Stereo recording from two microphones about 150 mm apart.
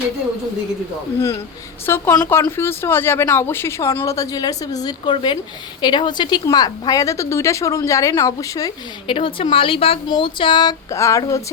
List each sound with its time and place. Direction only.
1.9 s speech: 20° left (ahead or behind)
9.1 s speech: 35° left (ahead or behind)